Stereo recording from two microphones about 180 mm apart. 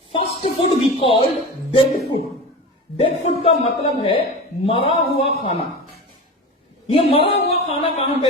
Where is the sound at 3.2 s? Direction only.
35° left (ahead or behind).